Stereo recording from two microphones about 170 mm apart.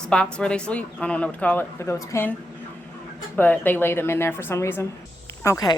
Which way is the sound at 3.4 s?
10° left (ahead or behind).